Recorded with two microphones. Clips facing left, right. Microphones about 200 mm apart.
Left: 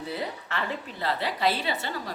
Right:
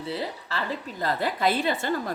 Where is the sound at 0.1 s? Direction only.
30° right (ahead or behind).